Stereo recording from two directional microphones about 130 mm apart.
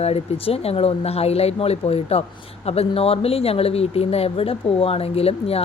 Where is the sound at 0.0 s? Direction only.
50° left (ahead or behind).